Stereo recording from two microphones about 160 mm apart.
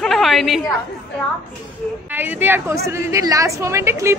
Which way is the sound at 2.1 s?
10° right (ahead or behind).